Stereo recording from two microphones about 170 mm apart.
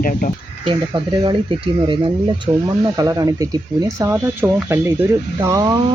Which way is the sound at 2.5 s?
20° right (ahead or behind).